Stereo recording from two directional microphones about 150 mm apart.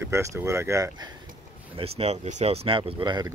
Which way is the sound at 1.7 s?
40° right (ahead or behind).